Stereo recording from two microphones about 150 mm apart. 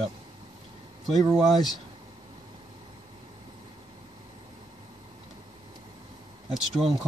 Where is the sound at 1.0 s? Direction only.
Centre (ahead or behind).